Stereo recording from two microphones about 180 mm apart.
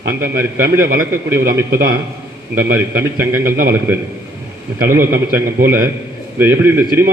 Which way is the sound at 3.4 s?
55° right (ahead or behind).